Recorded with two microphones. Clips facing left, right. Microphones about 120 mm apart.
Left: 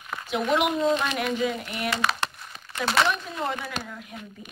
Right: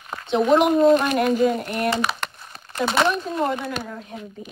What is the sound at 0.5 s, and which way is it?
Speech, 40° right (ahead or behind).